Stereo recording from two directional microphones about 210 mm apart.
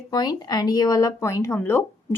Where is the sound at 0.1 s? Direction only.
20° left (ahead or behind).